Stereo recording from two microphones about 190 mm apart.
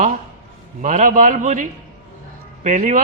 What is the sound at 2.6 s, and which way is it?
Speech, 40° right (ahead or behind).